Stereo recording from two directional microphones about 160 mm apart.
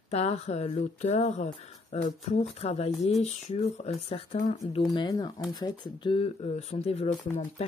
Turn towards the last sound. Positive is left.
turn(degrees=40)  # may be behind; listen again after turning